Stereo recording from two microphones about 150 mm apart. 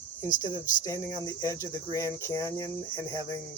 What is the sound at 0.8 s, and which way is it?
Speech, 20° left (ahead or behind).